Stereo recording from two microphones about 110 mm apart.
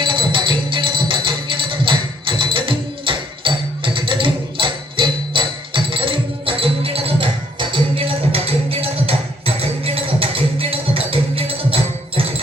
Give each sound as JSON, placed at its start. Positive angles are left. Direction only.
{"t": 0.0, "sound": "music", "side_deg": -50}